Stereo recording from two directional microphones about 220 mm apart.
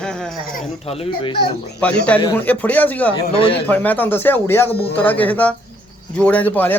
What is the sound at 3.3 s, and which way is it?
Speech, 25° left (ahead or behind).